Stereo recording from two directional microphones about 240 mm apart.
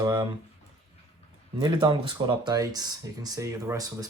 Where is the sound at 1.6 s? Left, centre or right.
Centre.